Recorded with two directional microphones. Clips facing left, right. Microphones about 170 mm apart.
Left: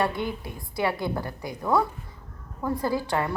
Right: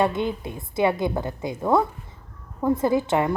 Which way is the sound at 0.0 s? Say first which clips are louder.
Right 4 dB; 20° right (ahead or behind).